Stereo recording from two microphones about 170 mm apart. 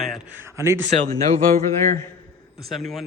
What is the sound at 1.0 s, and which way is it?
Speech, 35° right (ahead or behind).